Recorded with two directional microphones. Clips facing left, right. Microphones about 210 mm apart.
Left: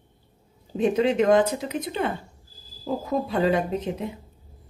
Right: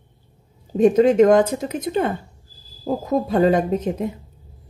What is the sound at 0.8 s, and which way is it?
Speech, 45° right (ahead or behind).